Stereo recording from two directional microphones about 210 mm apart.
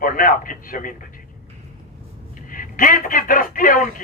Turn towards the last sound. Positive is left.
turn(degrees=40)  # may be behind; listen again after turning